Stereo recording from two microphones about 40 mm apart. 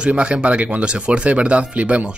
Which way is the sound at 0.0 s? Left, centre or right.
Right.